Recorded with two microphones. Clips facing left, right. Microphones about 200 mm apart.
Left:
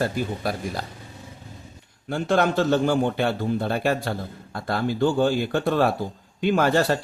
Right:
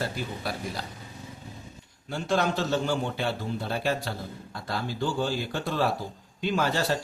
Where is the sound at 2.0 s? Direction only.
55° left (ahead or behind).